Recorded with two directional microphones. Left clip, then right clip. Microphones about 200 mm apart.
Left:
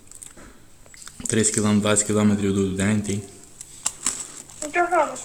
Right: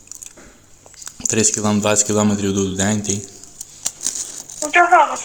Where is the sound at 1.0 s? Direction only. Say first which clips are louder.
Right 5 dB; 10° left (ahead or behind).